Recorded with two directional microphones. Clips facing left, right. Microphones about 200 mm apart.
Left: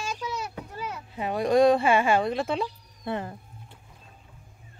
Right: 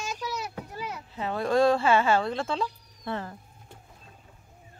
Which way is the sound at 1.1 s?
15° left (ahead or behind).